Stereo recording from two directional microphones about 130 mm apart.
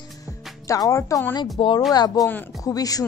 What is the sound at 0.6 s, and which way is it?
Music, 25° left (ahead or behind).